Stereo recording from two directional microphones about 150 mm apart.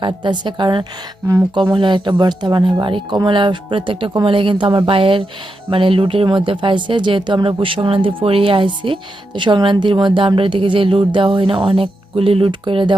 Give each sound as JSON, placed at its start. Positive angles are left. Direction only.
{"t": 0.0, "sound": "speech", "side_deg": -30}